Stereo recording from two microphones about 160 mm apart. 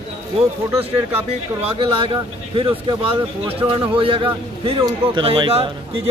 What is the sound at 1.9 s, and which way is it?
A man's voice, 35° right (ahead or behind).